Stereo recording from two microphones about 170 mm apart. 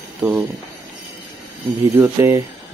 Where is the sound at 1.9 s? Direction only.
15° right (ahead or behind).